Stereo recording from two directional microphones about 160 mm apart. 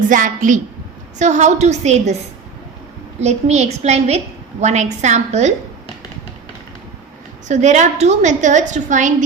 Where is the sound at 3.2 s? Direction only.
45° right (ahead or behind).